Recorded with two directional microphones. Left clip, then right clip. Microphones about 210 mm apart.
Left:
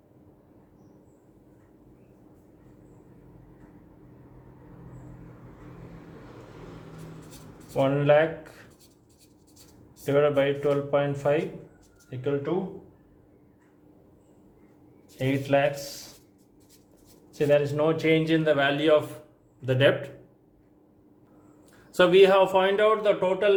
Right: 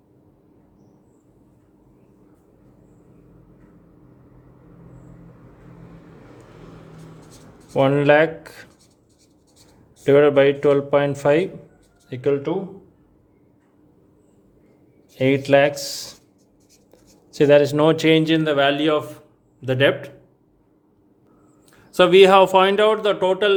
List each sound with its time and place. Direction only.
7.7 s a man's voice: 55° right (ahead or behind)
10.1 s speech: 55° right (ahead or behind)
15.2 s a man's voice: 55° right (ahead or behind)
17.3 s a man's voice: 55° right (ahead or behind); by 20.1 s 30° right (ahead or behind)
21.9 s a man's voice: 30° right (ahead or behind)